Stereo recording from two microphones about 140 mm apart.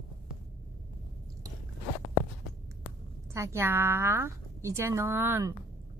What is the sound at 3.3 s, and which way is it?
A woman's voice, 20° right (ahead or behind).